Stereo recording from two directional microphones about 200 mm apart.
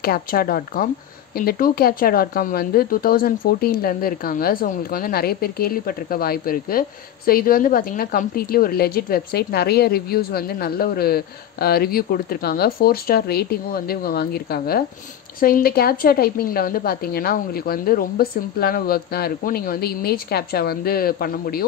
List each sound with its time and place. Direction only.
0.0 s speech: 50° left (ahead or behind)